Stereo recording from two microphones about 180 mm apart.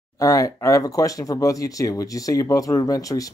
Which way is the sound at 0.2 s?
20° left (ahead or behind).